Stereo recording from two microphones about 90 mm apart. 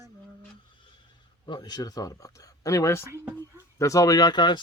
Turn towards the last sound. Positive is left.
turn(degrees=50)  # may be behind; listen again after turning